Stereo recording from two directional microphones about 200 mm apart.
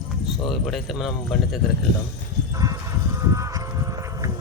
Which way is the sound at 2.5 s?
15° right (ahead or behind).